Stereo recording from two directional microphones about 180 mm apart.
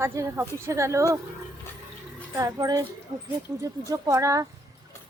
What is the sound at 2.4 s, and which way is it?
Speech, 20° right (ahead or behind).